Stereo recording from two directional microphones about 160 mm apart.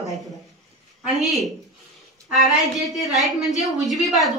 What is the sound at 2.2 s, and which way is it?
A woman's voice, centre (ahead or behind).